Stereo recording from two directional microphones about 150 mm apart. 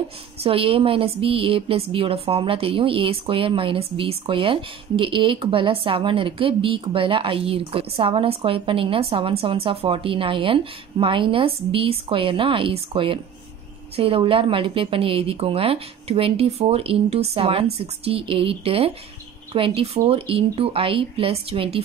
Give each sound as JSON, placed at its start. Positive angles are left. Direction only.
{"t": 0.4, "sound": "a woman's voice", "side_deg": -40}